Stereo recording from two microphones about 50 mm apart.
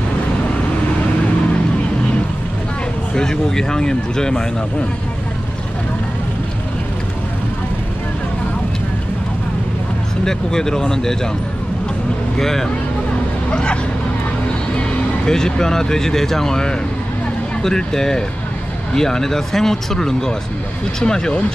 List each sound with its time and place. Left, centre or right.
3.2 s speech: centre
10.2 s speech: centre
12.4 s speech: centre
13.5 s speech: left
14.8 s speech: centre